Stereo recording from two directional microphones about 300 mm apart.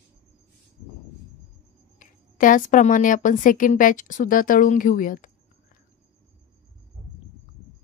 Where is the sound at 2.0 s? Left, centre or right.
Left.